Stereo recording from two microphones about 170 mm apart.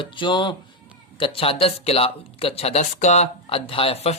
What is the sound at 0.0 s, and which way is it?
Speech, 25° left (ahead or behind).